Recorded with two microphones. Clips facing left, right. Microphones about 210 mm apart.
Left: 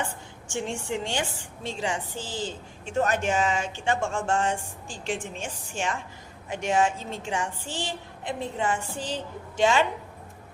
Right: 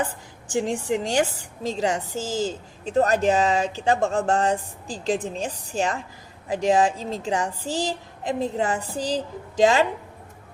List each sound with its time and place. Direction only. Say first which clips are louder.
0.5 s a woman's voice: right 6 dB; 35° right (ahead or behind)